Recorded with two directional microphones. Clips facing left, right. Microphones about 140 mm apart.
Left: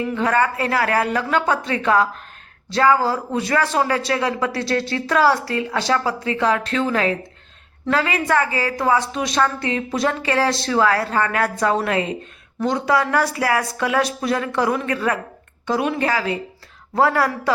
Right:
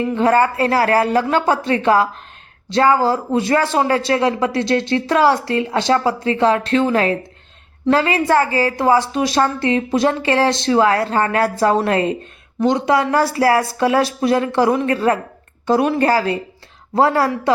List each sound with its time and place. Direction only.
0.0 s a woman's voice: 30° right (ahead or behind)
12.5 s a woman's voice: 20° right (ahead or behind); by 16.3 s 40° right (ahead or behind)
16.9 s a woman's voice: 30° right (ahead or behind)